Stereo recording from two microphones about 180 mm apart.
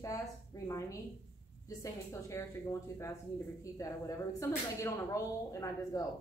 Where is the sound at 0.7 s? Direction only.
20° left (ahead or behind).